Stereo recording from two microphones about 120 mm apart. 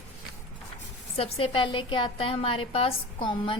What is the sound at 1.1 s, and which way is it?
A woman's voice, 50° left (ahead or behind).